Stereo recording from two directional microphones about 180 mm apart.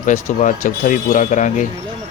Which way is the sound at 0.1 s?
45° left (ahead or behind).